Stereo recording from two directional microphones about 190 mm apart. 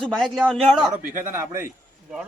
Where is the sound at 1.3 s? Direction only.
15° right (ahead or behind).